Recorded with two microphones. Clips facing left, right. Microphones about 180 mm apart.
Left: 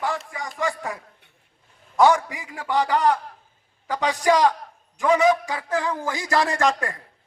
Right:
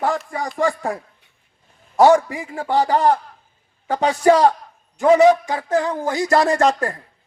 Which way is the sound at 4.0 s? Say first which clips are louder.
Right 5 dB; 30° right (ahead or behind).